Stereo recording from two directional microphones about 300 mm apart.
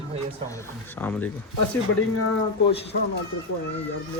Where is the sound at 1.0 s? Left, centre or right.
Centre.